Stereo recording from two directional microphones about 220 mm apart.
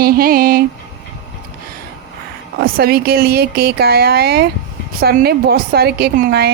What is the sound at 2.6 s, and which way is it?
A woman's voice, 45° right (ahead or behind).